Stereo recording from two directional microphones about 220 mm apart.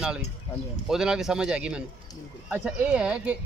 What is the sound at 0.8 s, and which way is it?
A man's voice, 5° right (ahead or behind).